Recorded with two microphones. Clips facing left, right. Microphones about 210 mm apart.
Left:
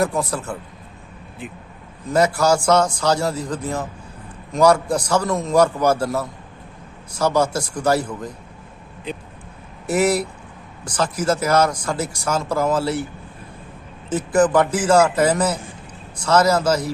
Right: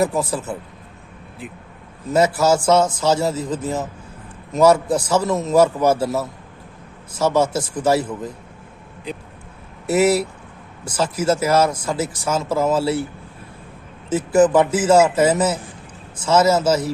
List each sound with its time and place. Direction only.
0.0 s a man's voice: 5° right (ahead or behind)
2.1 s a man's voice: 5° right (ahead or behind)
10.8 s a man's voice: 5° right (ahead or behind)
14.1 s a man's voice: 5° right (ahead or behind)